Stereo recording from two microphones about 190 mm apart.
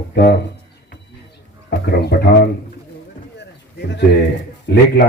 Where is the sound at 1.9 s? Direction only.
60° left (ahead or behind).